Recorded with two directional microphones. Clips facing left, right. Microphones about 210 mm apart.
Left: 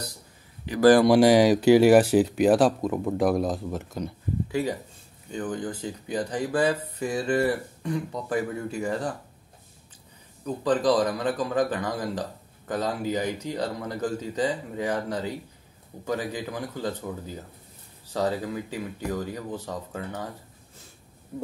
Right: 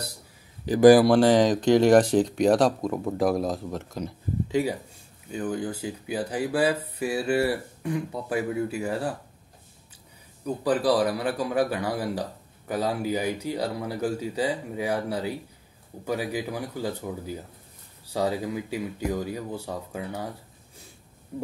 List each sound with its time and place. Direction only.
0.7 s a man's voice: 10° right (ahead or behind)
1.1 s speech: 10° left (ahead or behind)
4.5 s a man's voice: 15° right (ahead or behind)
10.4 s a man's voice: 10° right (ahead or behind)